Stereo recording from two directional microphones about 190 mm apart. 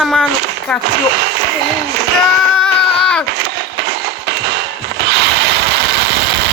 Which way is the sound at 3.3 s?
65° right (ahead or behind).